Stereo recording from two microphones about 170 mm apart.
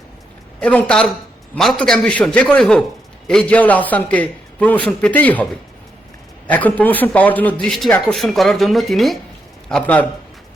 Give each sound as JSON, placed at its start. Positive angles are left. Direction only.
{"t": 0.6, "sound": "a man's voice", "side_deg": 5}
{"t": 6.5, "sound": "a man's voice", "side_deg": 10}